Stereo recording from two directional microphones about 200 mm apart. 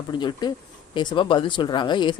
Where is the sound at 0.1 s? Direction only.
20° left (ahead or behind).